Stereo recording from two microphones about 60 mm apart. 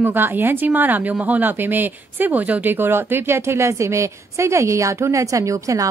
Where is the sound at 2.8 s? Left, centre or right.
Right.